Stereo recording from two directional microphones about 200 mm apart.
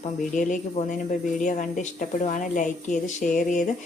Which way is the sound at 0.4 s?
40° left (ahead or behind).